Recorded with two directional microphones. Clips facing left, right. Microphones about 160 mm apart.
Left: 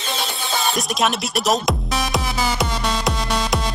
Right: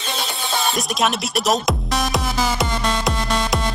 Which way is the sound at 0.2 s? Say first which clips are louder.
Right 1 dB; centre (ahead or behind).